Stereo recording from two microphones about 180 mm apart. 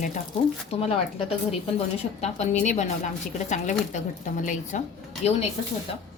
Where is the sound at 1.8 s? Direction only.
35° left (ahead or behind).